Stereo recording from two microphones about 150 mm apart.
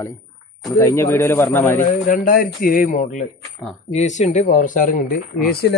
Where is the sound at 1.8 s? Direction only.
65° left (ahead or behind).